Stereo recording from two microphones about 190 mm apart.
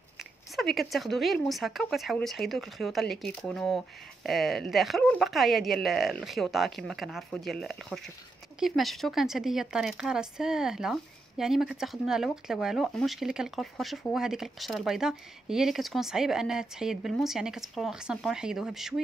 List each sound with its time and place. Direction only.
0.2 s speech: centre (ahead or behind)